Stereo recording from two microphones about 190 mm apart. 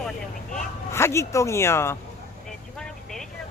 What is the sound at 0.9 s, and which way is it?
Speech, 15° left (ahead or behind).